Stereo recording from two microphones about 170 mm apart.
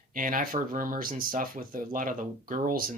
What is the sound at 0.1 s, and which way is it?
Speech, 55° right (ahead or behind).